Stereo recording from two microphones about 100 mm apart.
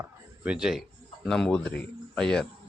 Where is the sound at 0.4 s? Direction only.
5° right (ahead or behind).